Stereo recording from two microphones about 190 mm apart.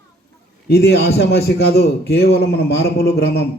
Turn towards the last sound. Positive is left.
turn(degrees=60)  # may be behind; listen again after turning